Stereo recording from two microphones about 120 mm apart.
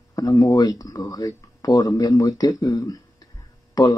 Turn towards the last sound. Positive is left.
turn(degrees=30)  # may be behind; listen again after turning